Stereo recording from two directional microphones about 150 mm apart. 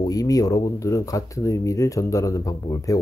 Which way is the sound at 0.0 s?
25° left (ahead or behind).